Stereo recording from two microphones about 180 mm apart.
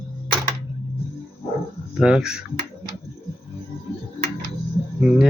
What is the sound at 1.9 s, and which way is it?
Speech, 5° right (ahead or behind).